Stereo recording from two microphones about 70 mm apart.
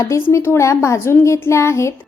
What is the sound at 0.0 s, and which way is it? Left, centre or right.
A woman's voice, left.